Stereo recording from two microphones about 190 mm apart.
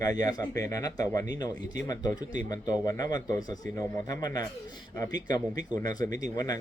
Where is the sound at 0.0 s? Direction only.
20° left (ahead or behind).